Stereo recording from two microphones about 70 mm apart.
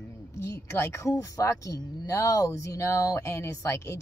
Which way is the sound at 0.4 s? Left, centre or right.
Left.